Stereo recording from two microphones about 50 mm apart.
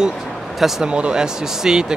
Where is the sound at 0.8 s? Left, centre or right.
Right.